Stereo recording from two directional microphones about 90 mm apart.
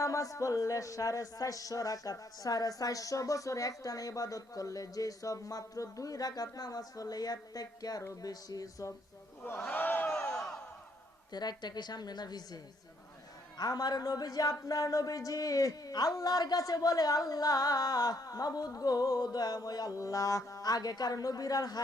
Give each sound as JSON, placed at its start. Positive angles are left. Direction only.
{"t": 0.0, "sound": "speech", "side_deg": 40}
{"t": 9.4, "sound": "speech", "side_deg": 20}
{"t": 10.2, "sound": "crowd", "side_deg": 30}
{"t": 11.3, "sound": "speech", "side_deg": 50}
{"t": 13.6, "sound": "speech", "side_deg": 45}